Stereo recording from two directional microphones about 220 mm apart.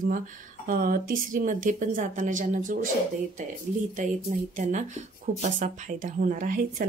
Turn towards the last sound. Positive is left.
turn(degrees=-35)  # may be behind; listen again after turning